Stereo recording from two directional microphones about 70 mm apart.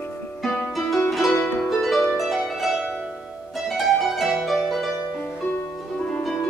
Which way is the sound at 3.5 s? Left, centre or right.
Centre.